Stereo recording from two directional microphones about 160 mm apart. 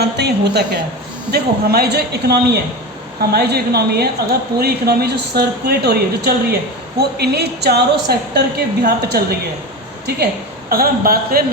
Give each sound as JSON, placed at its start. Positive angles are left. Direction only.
{"t": 0.0, "sound": "a woman's voice", "side_deg": -90}
{"t": 7.0, "sound": "a woman's voice", "side_deg": -90}
{"t": 10.7, "sound": "a man's voice", "side_deg": -70}